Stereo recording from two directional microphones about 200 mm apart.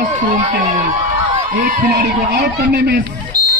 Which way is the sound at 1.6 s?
50° right (ahead or behind).